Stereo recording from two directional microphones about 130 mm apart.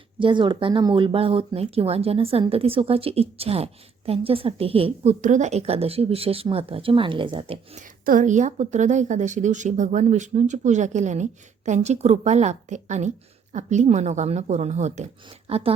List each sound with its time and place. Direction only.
0.2 s a woman's voice: 40° right (ahead or behind)
5.2 s a woman's voice: 70° right (ahead or behind); by 7.6 s 45° right (ahead or behind)
7.8 s a woman's voice: 80° right; by 15.7 s 50° right (ahead or behind)